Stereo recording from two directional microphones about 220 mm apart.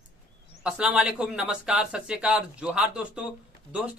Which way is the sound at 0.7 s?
5° right (ahead or behind).